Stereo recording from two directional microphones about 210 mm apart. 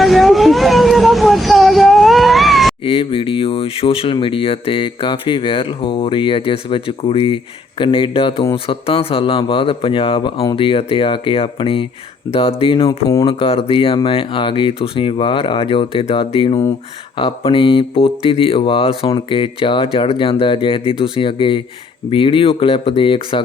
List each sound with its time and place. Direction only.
0.0 s vehicle: centre (ahead or behind)
2.8 s speech: 25° left (ahead or behind)